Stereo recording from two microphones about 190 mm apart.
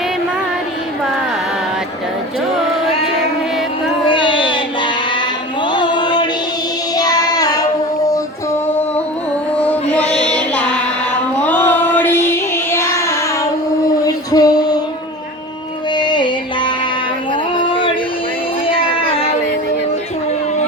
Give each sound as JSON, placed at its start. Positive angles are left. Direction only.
{"t": 4.1, "sound": "music", "side_deg": 25}
{"t": 6.9, "sound": "child singing", "side_deg": 20}
{"t": 9.6, "sound": "music", "side_deg": 5}
{"t": 11.4, "sound": "child singing", "side_deg": 10}
{"t": 14.0, "sound": "singing", "side_deg": 20}
{"t": 16.0, "sound": "music", "side_deg": 25}
{"t": 18.7, "sound": "a sound", "side_deg": 30}